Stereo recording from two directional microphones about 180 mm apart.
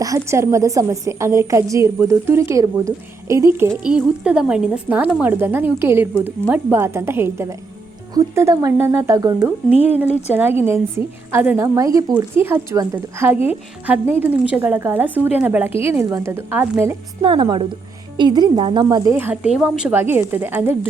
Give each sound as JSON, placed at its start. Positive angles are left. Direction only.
{"t": 0.0, "sound": "a woman's voice", "side_deg": -15}
{"t": 10.6, "sound": "a woman's voice", "side_deg": -15}
{"t": 17.2, "sound": "a woman's voice", "side_deg": -30}